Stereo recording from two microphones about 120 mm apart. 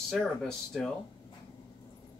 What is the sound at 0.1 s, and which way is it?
Speech, centre (ahead or behind).